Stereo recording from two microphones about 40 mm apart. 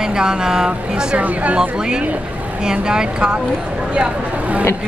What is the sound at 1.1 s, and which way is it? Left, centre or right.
Speech, right.